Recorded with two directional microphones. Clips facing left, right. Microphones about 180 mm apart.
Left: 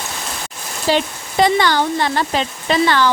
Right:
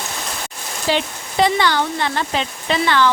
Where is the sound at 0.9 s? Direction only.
45° left (ahead or behind).